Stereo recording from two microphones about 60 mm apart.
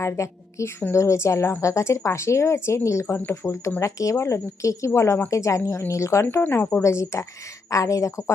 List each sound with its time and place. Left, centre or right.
0.0 s a woman's voice: left
6.4 s speech: left
6.8 s speech: left
7.7 s speech: left